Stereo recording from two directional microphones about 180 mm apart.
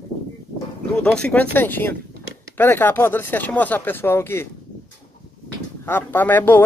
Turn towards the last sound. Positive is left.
turn(degrees=10)  # may be behind; listen again after turning